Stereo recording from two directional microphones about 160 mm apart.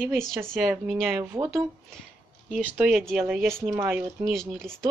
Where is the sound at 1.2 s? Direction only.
15° right (ahead or behind).